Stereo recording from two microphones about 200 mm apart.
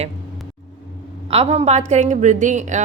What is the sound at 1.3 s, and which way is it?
Speech, 30° right (ahead or behind).